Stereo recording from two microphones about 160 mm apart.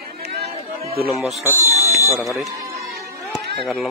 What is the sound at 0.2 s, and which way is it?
Chatter, 90° right.